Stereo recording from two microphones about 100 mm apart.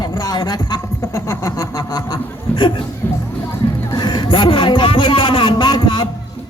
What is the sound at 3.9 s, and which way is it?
Speech, 45° left (ahead or behind).